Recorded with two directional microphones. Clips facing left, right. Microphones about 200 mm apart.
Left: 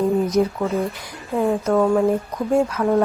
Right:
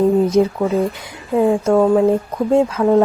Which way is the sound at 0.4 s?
25° right (ahead or behind).